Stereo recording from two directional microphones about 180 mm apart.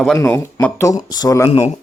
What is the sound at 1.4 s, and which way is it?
Speech, 35° left (ahead or behind).